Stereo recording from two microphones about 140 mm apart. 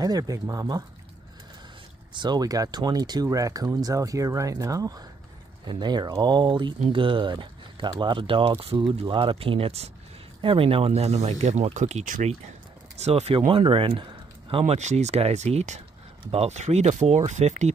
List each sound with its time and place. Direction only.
0.0 s speech: 25° right (ahead or behind)
2.1 s speech: 30° right (ahead or behind); by 12.4 s 60° right (ahead or behind)
13.0 s speech: 45° right (ahead or behind)